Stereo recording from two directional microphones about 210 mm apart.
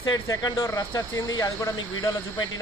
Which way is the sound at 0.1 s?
15° left (ahead or behind).